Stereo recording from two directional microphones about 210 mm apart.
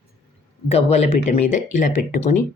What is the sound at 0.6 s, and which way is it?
Speech, 30° left (ahead or behind).